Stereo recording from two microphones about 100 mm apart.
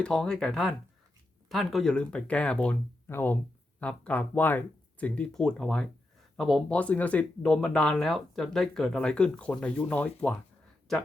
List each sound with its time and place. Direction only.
0.0 s speech: 5° left (ahead or behind)
3.1 s speech: 25° left (ahead or behind)
3.8 s speech: 15° left (ahead or behind)
6.7 s speech: 15° left (ahead or behind)
10.9 s speech: 5° left (ahead or behind)